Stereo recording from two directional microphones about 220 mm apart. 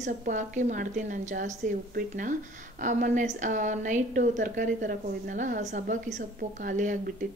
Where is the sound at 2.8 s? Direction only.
35° right (ahead or behind).